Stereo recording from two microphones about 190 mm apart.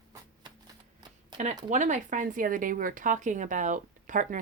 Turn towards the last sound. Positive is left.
turn(degrees=-40)  # may be behind; listen again after turning